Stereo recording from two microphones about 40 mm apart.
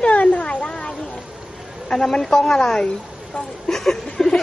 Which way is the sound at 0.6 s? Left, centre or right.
Left.